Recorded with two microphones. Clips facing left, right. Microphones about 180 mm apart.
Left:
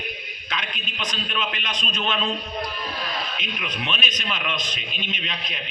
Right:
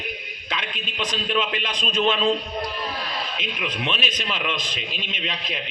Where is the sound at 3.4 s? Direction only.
30° right (ahead or behind).